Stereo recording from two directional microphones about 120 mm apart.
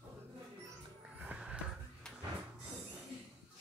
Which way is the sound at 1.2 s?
10° right (ahead or behind).